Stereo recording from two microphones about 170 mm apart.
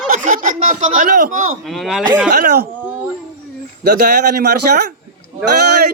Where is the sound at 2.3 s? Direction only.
60° right (ahead or behind).